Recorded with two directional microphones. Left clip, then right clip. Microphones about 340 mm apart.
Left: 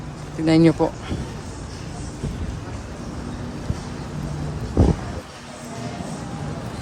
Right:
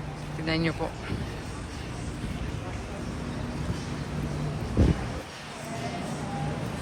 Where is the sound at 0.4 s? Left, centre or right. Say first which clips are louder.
Left 12 dB; centre.